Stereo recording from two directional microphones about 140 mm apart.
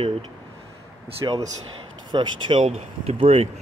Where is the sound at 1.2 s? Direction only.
30° right (ahead or behind); by 3.4 s 45° right (ahead or behind).